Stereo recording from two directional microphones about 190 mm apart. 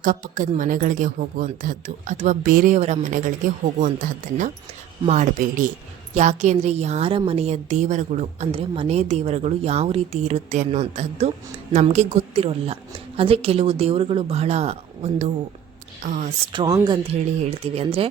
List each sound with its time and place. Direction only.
0.0 s a woman's voice: 45° right (ahead or behind)
16.5 s a woman's voice: 20° right (ahead or behind)